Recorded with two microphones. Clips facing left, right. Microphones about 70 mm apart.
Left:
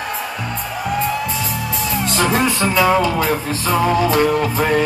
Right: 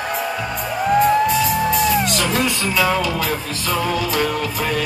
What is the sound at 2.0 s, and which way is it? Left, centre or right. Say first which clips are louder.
Music: left 3 dB; left.